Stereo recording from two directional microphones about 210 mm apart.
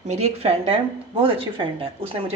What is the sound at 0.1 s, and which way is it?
A woman's voice, 30° right (ahead or behind).